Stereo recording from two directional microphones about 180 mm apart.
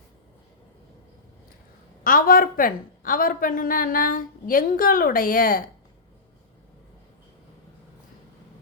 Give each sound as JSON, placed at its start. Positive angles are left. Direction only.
{"t": 2.0, "sound": "a woman's voice", "side_deg": 50}